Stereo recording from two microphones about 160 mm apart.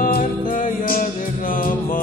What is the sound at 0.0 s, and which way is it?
Music, 60° left (ahead or behind).